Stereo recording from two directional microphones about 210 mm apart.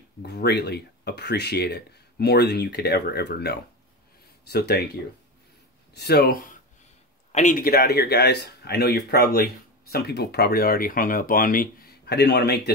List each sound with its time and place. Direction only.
0.2 s speech: 50° left (ahead or behind)
5.9 s speech: 50° left (ahead or behind)